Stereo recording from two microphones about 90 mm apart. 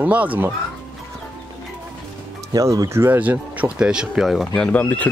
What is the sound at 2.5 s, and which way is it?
Speech, 40° right (ahead or behind).